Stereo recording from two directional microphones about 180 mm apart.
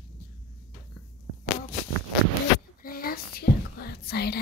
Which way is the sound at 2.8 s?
55° left (ahead or behind).